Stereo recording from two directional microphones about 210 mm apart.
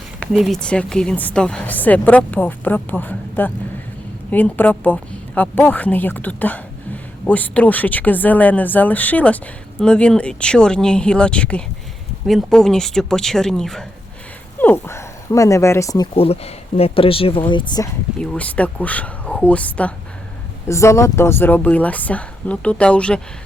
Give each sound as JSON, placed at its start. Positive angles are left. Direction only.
{"t": 0.2, "sound": "a woman's voice", "side_deg": 0}
{"t": 16.1, "sound": "speech", "side_deg": 30}
{"t": 18.2, "sound": "a woman's voice", "side_deg": 5}